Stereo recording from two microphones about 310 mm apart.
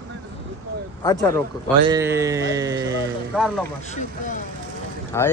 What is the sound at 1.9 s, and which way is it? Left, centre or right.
Speech, centre.